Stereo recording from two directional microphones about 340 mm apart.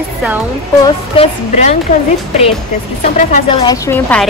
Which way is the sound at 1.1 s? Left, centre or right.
Centre.